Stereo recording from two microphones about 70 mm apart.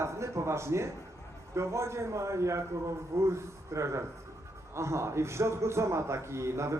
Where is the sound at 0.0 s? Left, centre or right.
Right.